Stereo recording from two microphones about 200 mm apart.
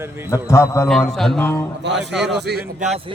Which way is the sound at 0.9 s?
Centre (ahead or behind).